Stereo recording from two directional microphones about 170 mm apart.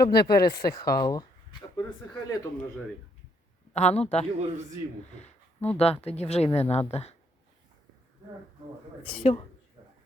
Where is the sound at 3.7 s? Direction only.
40° left (ahead or behind).